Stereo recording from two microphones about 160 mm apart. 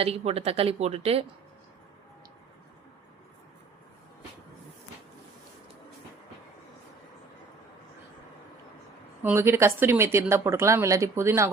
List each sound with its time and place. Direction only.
0.0 s speech: 40° right (ahead or behind)
9.2 s a woman's voice: 15° right (ahead or behind)